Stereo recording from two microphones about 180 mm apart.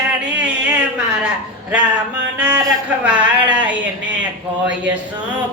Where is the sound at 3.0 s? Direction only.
5° right (ahead or behind).